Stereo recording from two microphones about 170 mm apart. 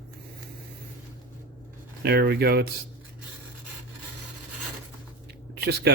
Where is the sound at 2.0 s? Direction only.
70° right (ahead or behind).